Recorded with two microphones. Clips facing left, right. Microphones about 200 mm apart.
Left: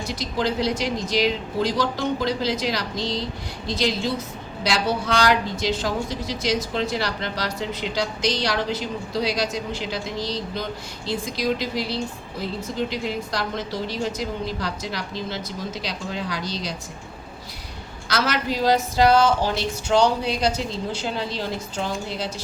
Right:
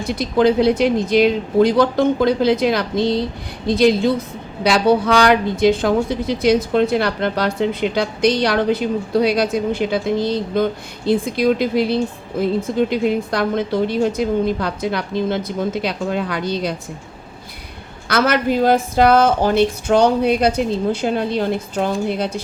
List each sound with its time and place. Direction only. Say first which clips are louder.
0.0 s a woman's voice: right 10 dB; 55° right (ahead or behind)
18.1 s a woman's voice: right 8 dB; 55° right (ahead or behind)